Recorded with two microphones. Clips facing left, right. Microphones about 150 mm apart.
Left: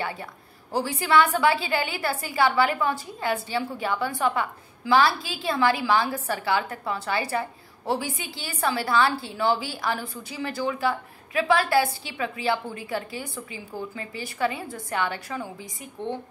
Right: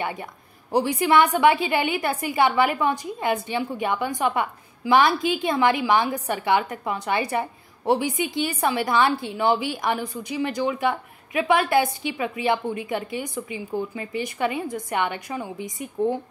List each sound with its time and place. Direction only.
0.0 s a woman's voice: 20° right (ahead or behind)